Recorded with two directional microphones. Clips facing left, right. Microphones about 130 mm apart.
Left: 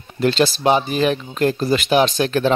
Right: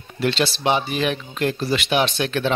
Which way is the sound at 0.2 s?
40° left (ahead or behind).